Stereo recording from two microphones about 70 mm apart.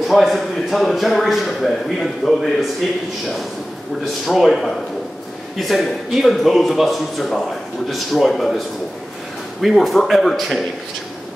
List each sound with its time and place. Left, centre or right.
0.0 s a man's voice: centre
4.3 s a man's voice: centre